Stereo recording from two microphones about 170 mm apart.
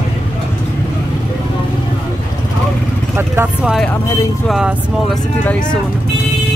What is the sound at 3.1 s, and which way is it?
Speech, 10° right (ahead or behind).